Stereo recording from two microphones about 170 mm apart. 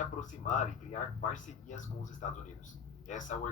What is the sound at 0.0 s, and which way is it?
Speech, 45° left (ahead or behind).